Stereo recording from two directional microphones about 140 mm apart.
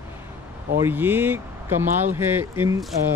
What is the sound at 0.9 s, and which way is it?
Speech, 15° right (ahead or behind).